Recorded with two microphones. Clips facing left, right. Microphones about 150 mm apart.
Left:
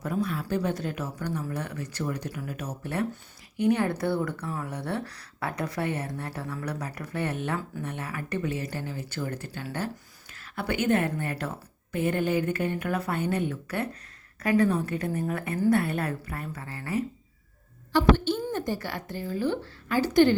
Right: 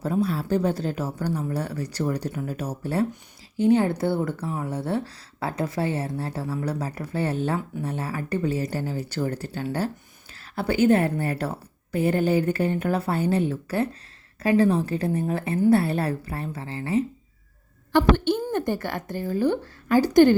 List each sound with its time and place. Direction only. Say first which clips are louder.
0.0 s a woman's voice: right 5 dB; 30° right (ahead or behind)
17.9 s a woman's voice: right 2 dB; 55° right (ahead or behind)